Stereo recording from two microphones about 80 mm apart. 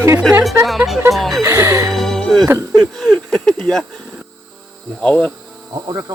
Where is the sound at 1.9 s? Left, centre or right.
Centre.